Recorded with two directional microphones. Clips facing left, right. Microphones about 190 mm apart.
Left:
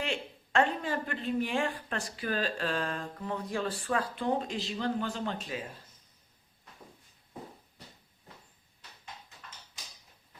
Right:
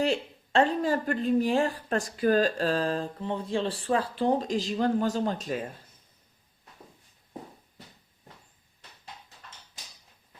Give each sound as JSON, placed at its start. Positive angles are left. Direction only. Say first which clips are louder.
{"t": 0.0, "sound": "a woman's voice", "louder": "right 8 dB", "side_deg": -35}